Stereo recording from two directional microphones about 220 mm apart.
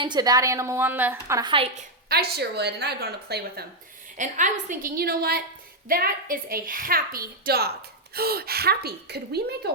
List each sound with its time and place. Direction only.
0.0 s a woman's voice: 20° right (ahead or behind)
2.0 s a woman's voice: 45° right (ahead or behind)
4.2 s a woman's voice: 35° right (ahead or behind)